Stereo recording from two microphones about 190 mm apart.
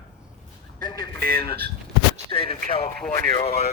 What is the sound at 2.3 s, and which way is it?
Speech, 25° left (ahead or behind).